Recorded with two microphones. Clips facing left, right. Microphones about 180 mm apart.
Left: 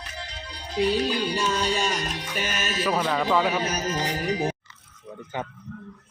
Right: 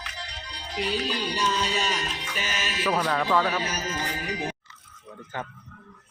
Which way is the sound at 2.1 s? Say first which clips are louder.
Left 3 dB; 60° left (ahead or behind).